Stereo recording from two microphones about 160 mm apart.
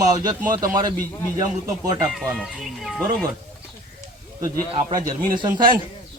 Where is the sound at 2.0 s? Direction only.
5° right (ahead or behind).